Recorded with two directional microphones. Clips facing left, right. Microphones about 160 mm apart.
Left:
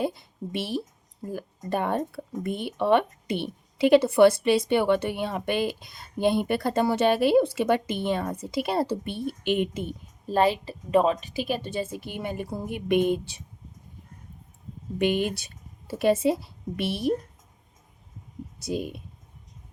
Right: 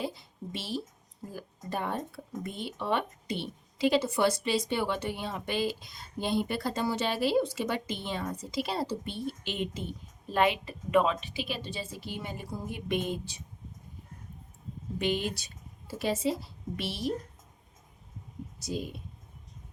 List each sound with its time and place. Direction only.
0.0 s a woman's voice: 55° left (ahead or behind)
10.2 s a woman's voice: 35° left (ahead or behind); by 13.4 s 60° left (ahead or behind)
14.9 s speech: 55° left (ahead or behind)
18.6 s speech: 55° left (ahead or behind)